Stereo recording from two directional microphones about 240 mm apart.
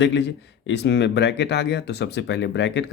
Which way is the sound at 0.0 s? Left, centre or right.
Left.